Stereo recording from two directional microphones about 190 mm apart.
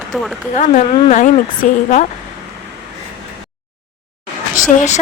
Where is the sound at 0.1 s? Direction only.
Centre (ahead or behind).